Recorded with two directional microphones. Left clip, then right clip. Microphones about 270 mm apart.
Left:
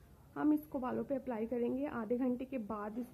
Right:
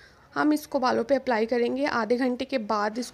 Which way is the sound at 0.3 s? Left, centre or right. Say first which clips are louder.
Right 10 dB; right.